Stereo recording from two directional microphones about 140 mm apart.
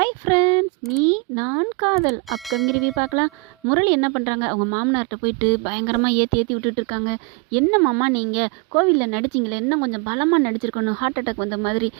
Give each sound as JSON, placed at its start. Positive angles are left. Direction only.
{"t": 0.0, "sound": "a sound", "side_deg": -35}
{"t": 1.0, "sound": "speech", "side_deg": -30}
{"t": 2.3, "sound": "speech", "side_deg": 0}
{"t": 3.2, "sound": "a woman's voice", "side_deg": -35}
{"t": 8.1, "sound": "speech", "side_deg": 0}
{"t": 8.4, "sound": "a woman's voice", "side_deg": -35}